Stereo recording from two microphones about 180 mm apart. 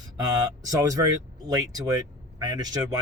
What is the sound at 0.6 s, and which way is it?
Speech, 20° right (ahead or behind).